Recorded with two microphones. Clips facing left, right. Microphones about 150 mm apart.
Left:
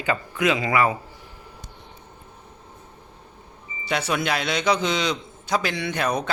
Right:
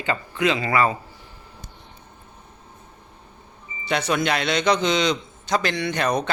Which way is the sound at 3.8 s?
5° left (ahead or behind).